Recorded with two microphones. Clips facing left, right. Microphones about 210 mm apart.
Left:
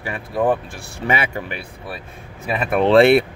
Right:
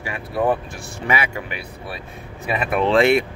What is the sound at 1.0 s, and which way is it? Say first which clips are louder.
Speech: left 2 dB; 30° left (ahead or behind).